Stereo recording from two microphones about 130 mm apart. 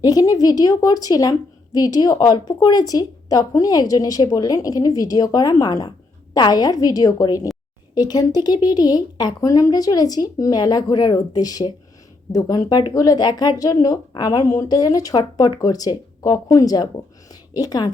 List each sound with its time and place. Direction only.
0.0 s a woman's voice: 30° left (ahead or behind)